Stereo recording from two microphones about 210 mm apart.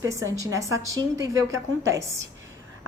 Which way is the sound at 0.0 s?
15° right (ahead or behind).